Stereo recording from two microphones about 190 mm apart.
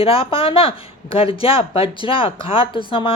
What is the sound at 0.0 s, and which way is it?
A woman's voice, 30° left (ahead or behind).